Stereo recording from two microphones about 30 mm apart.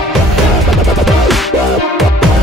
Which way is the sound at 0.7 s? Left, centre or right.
Centre.